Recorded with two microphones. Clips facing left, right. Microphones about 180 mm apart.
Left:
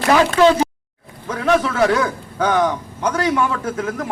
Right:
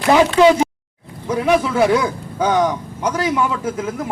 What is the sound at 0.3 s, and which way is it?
A man's voice, 15° right (ahead or behind).